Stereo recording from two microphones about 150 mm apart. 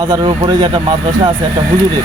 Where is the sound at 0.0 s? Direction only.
30° right (ahead or behind).